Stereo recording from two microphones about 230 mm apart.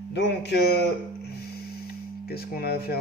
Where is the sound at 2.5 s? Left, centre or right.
Left.